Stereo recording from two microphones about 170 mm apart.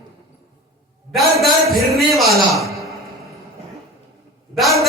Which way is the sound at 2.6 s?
Centre (ahead or behind).